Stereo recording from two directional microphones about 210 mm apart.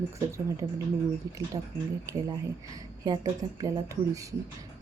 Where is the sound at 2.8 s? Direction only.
20° right (ahead or behind).